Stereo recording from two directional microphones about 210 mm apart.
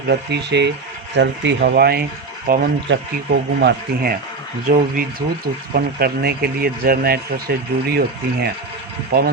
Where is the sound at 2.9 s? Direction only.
55° right (ahead or behind).